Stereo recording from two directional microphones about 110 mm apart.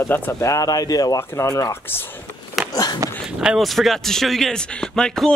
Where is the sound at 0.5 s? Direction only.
30° left (ahead or behind).